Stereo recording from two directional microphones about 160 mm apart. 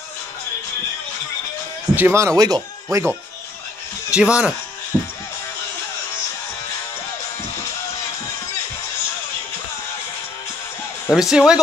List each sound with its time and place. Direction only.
2.0 s speech: 15° right (ahead or behind)
4.1 s speech: 5° right (ahead or behind)
4.9 s music: 5° left (ahead or behind)
11.1 s speech: centre (ahead or behind)